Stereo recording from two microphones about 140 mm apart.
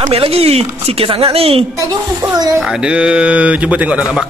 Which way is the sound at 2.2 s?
30° right (ahead or behind).